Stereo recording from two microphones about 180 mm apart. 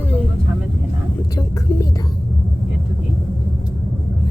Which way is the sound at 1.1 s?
15° left (ahead or behind).